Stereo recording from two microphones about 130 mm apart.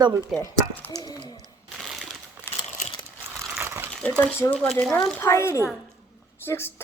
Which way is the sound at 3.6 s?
20° right (ahead or behind).